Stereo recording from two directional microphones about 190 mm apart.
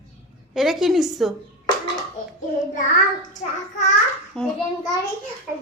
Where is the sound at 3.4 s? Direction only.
35° left (ahead or behind).